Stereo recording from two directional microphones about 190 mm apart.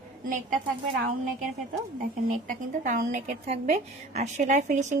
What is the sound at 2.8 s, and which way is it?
A woman's voice, 40° right (ahead or behind).